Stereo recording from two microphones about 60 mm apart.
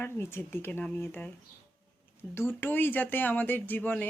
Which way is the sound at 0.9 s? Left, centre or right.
Left.